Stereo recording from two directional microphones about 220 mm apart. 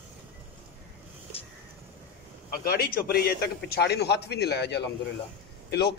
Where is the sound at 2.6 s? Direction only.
40° left (ahead or behind).